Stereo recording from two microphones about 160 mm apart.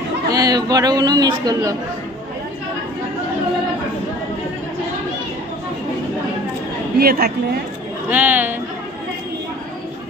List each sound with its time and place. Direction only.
0.3 s a man's voice: 25° right (ahead or behind)
7.0 s a woman's voice: 70° right (ahead or behind)
8.1 s a woman's voice: 10° right (ahead or behind)